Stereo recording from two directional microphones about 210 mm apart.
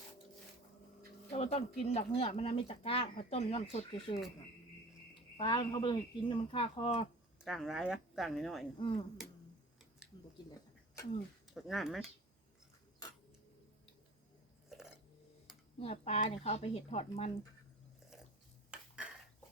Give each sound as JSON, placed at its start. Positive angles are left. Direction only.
{"t": 1.3, "sound": "speech", "side_deg": 30}
{"t": 5.4, "sound": "speech", "side_deg": 20}
{"t": 7.4, "sound": "speech", "side_deg": 0}
{"t": 8.8, "sound": "speech", "side_deg": 25}
{"t": 11.5, "sound": "speech", "side_deg": 0}
{"t": 14.7, "sound": "a sound", "side_deg": 0}
{"t": 15.8, "sound": "speech", "side_deg": 30}
{"t": 18.7, "sound": "dishes", "side_deg": -5}